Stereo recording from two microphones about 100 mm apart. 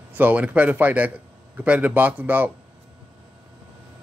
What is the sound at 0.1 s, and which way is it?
A man's voice, 15° right (ahead or behind).